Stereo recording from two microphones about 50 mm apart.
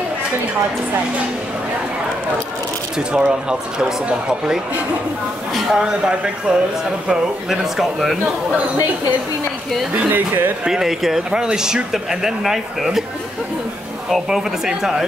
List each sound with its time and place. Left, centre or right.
3.1 s speech: centre
5.7 s speech: centre
9.9 s speech: right
10.6 s speech: centre
14.3 s speech: centre